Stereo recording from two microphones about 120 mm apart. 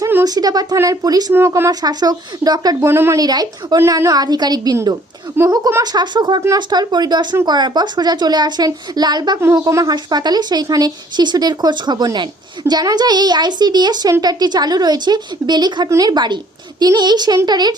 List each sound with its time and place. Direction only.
0.0 s a sound: 20° right (ahead or behind)
0.3 s speech: 35° right (ahead or behind)
1.3 s speech: 20° right (ahead or behind)
1.8 s speech: 35° right (ahead or behind)
2.9 s speech: 20° right (ahead or behind)
3.2 s speech: 35° right (ahead or behind)